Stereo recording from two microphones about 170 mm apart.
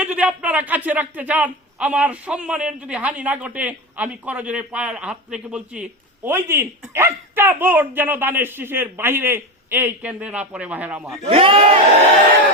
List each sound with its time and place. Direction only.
0.0 s a man's voice: 10° right (ahead or behind)
11.2 s speech: 35° right (ahead or behind)